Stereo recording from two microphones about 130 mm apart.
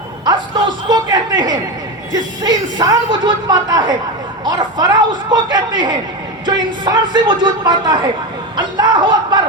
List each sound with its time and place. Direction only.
0.3 s speech: 35° right (ahead or behind)
6.4 s music: 35° right (ahead or behind)
7.4 s speech: 35° right (ahead or behind)